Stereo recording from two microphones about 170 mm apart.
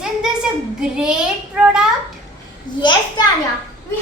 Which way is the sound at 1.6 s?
5° right (ahead or behind).